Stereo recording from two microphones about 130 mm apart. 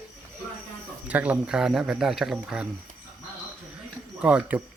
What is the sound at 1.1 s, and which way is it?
Speech, 10° right (ahead or behind).